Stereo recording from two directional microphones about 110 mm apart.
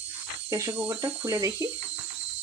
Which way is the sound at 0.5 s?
25° right (ahead or behind).